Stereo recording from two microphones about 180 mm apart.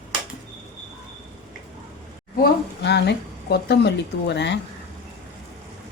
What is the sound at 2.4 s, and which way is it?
A woman's voice, 70° left (ahead or behind).